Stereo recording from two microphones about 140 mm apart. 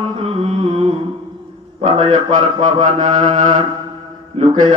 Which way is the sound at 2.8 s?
55° right (ahead or behind).